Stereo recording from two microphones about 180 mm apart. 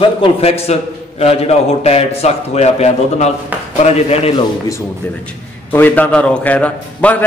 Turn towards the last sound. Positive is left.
turn(degrees=10)  # may be behind; listen again after turning